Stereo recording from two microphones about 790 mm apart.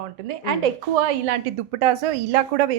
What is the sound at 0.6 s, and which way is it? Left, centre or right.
Speech, right.